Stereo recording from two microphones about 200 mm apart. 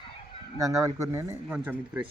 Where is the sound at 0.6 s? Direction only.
15° right (ahead or behind).